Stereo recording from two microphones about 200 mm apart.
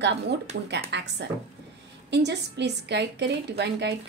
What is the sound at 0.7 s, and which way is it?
A woman's voice, 60° right (ahead or behind).